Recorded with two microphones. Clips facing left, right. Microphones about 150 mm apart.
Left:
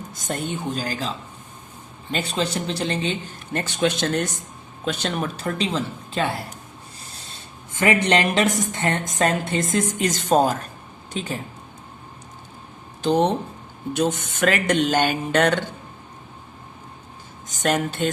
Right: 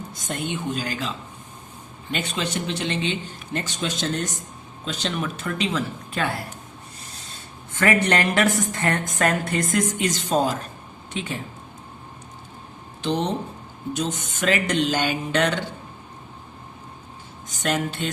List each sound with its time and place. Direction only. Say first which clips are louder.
0.1 s speech: left 2 dB; 40° left (ahead or behind)
3.5 s speech: left 6 dB; 60° left (ahead or behind)
4.9 s speech: left 2 dB; 45° left (ahead or behind); by 6.4 s 25° left (ahead or behind)
7.8 s a woman's voice: left 1 dB; 20° left (ahead or behind)
10.0 s speech: left 3 dB; 50° left (ahead or behind)
11.1 s speech: left 2 dB; 40° left (ahead or behind)
13.0 s speech: left 5 dB; 45° left (ahead or behind)
13.9 s speech: left 5 dB; 60° left (ahead or behind)
17.6 s speech: left 3 dB; 45° left (ahead or behind)